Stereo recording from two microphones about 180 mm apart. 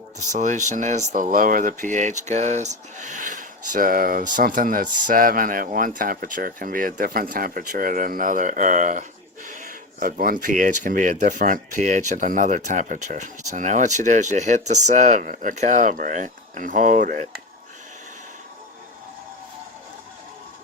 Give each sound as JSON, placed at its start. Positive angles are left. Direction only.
{"t": 0.3, "sound": "speech", "side_deg": -40}